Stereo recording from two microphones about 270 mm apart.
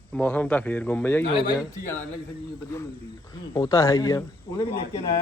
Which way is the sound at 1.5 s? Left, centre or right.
Centre.